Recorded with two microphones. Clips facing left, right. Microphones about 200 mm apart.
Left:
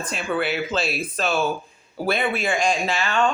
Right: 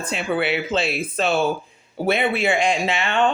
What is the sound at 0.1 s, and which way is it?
Speech, 25° right (ahead or behind).